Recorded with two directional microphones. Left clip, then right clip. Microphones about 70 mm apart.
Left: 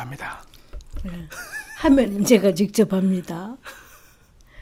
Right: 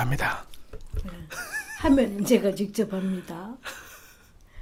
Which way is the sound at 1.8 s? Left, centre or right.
Left.